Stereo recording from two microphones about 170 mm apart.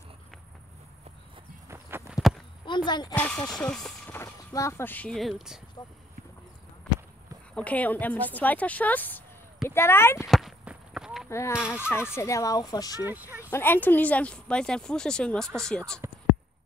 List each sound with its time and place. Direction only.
1.7 s walk: 15° right (ahead or behind)
2.6 s speech: 25° left (ahead or behind)
3.2 s speech: 10° left (ahead or behind)
7.5 s speech: 10° left (ahead or behind)
10.2 s a sound: centre (ahead or behind)
11.2 s speech: 15° left (ahead or behind)
11.9 s fowl: 15° left (ahead or behind)
13.0 s speech: 10° right (ahead or behind)
13.5 s speech: 15° left (ahead or behind)